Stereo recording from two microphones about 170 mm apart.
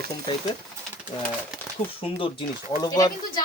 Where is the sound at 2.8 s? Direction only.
25° left (ahead or behind).